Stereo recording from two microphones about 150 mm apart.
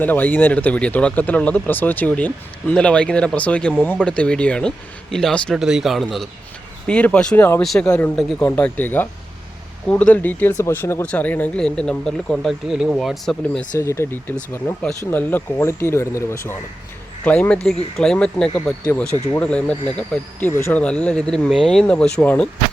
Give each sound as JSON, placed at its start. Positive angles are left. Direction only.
{"t": 0.0, "sound": "speech", "side_deg": 10}
{"t": 13.7, "sound": "speech", "side_deg": 20}